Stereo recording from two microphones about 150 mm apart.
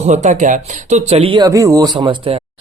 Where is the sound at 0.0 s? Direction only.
50° right (ahead or behind).